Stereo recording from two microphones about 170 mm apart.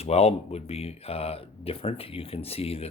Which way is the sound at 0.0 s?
40° left (ahead or behind).